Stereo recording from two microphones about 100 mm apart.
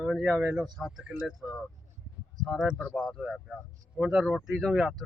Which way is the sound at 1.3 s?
Centre (ahead or behind).